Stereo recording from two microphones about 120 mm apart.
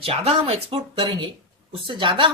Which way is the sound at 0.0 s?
55° right (ahead or behind).